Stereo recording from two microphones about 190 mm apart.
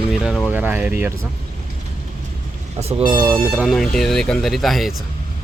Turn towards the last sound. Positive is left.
turn(degrees=0)  # may be behind; listen again after turning